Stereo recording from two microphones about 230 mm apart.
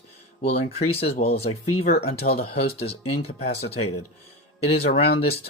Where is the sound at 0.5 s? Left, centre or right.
Left.